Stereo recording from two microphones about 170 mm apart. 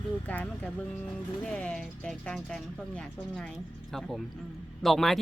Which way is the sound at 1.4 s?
5° left (ahead or behind).